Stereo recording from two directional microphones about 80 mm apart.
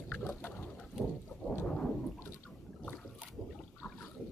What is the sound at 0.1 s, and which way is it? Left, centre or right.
Bird, left.